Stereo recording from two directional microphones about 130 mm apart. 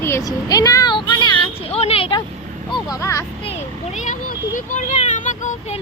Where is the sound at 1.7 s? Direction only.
50° left (ahead or behind).